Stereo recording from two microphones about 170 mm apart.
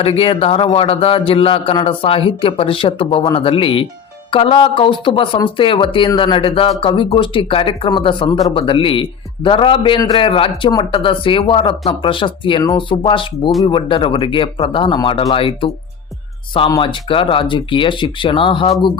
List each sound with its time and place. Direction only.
0.0 s speech: 35° left (ahead or behind)